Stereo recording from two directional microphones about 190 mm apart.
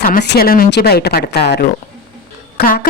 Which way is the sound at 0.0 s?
55° left (ahead or behind).